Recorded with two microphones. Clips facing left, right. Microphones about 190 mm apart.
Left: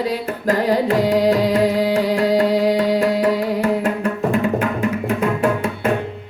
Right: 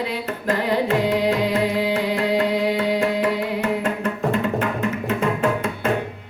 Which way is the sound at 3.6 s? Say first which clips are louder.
Left 4 dB; 10° left (ahead or behind).